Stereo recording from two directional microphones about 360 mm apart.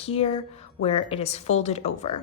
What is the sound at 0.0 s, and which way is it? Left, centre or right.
A woman's voice, centre.